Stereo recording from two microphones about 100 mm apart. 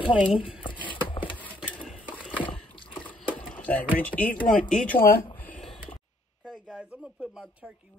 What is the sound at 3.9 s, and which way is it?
Speech, 15° left (ahead or behind).